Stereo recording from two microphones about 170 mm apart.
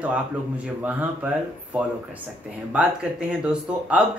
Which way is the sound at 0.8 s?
10° right (ahead or behind).